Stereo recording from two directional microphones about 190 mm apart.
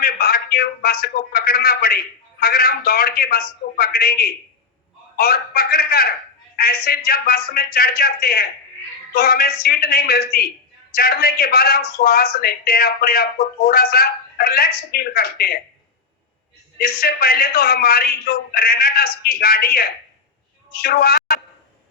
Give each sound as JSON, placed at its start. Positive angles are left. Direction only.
{"t": 0.0, "sound": "a man's voice", "side_deg": 55}
{"t": 16.7, "sound": "speech", "side_deg": 50}